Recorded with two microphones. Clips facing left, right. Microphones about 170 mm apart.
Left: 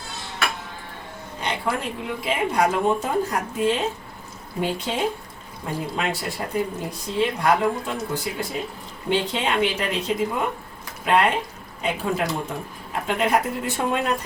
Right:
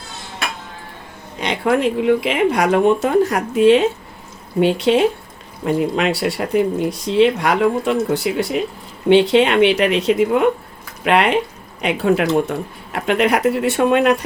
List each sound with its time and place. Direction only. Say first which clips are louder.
1.4 s speech: right 9 dB; 90° right